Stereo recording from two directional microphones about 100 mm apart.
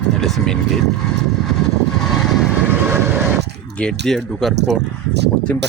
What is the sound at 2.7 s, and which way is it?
Vehicle, 20° right (ahead or behind).